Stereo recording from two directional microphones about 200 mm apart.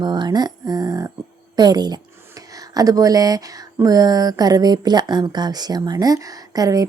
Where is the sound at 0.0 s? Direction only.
20° right (ahead or behind).